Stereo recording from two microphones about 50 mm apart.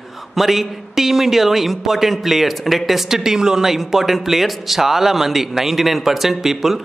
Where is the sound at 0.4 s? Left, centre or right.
Centre.